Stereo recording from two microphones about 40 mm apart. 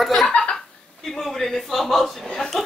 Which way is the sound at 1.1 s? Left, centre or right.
Centre.